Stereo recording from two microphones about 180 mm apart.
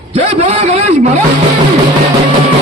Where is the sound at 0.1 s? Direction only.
35° right (ahead or behind).